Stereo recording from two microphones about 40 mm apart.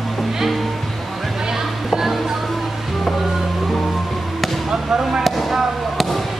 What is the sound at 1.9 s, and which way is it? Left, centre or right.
Speech, centre.